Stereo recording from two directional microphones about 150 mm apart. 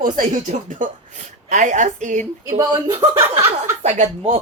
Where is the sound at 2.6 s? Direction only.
25° right (ahead or behind).